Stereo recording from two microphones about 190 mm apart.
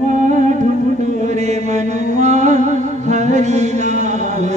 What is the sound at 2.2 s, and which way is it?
Mantra, 40° right (ahead or behind).